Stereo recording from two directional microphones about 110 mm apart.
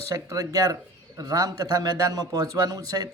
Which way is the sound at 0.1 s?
30° right (ahead or behind).